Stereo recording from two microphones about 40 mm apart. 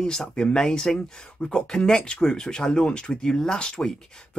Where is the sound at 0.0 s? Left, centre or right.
Centre.